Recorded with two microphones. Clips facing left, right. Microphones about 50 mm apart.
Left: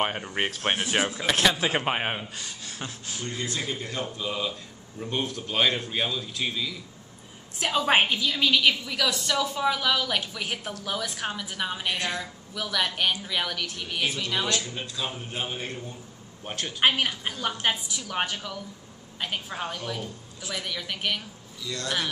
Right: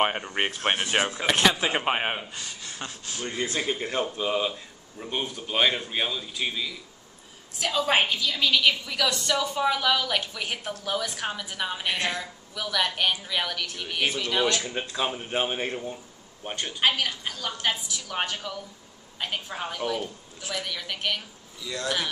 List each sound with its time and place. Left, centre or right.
0.2 s a man's voice: centre
3.2 s speech: right
4.9 s a man's voice: centre
7.6 s a woman's voice: centre
14.5 s speech: right
16.4 s a man's voice: centre
16.8 s a woman's voice: centre
21.6 s a man's voice: centre